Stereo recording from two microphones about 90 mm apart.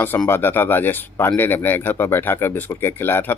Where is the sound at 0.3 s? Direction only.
25° left (ahead or behind).